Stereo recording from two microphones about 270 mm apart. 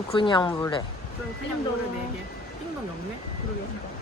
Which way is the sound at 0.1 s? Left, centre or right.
Centre.